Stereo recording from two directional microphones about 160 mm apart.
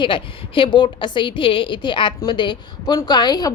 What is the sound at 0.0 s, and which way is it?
A woman's voice, 30° left (ahead or behind).